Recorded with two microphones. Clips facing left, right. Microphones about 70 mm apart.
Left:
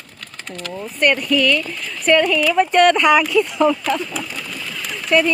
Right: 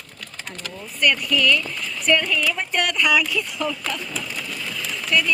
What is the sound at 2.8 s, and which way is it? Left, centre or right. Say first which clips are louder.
Speech: left 5 dB; left.